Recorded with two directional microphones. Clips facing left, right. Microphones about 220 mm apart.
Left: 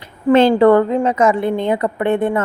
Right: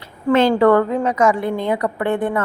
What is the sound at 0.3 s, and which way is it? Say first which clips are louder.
A woman's voice: left 3 dB; 25° left (ahead or behind).